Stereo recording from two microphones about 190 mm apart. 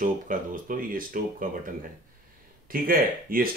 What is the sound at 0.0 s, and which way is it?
Speech, 45° right (ahead or behind).